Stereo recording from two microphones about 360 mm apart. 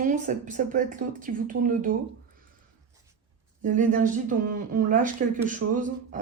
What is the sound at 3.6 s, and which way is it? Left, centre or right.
Speech, right.